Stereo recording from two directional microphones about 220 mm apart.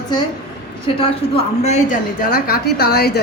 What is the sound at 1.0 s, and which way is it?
A woman's voice, 30° left (ahead or behind).